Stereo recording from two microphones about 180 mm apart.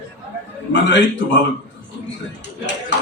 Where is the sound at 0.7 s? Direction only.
80° left.